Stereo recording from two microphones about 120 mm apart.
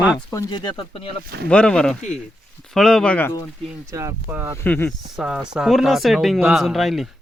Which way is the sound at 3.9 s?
25° right (ahead or behind).